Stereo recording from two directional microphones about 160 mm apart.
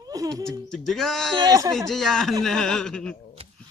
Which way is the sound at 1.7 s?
Centre (ahead or behind).